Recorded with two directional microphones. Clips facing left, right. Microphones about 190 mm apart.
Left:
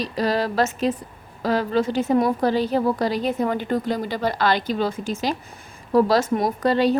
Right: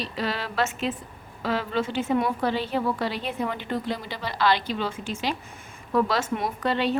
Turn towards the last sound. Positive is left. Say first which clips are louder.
# left 6 dB
turn(degrees=40)  # may be behind; listen again after turning